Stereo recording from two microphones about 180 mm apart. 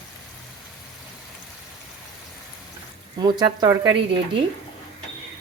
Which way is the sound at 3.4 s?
25° right (ahead or behind).